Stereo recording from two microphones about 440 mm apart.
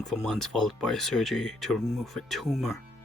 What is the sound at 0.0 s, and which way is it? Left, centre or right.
Speech, centre.